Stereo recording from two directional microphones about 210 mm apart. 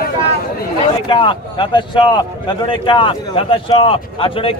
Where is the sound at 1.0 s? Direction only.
20° left (ahead or behind).